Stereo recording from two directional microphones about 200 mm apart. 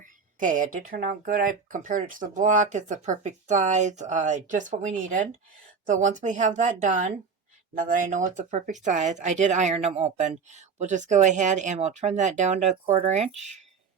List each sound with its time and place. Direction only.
0.3 s speech: 40° right (ahead or behind)